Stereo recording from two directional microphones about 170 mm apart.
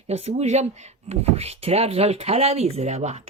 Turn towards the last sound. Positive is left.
turn(degrees=-40)  # may be behind; listen again after turning